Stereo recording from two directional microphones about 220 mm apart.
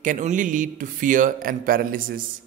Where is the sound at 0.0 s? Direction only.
35° right (ahead or behind).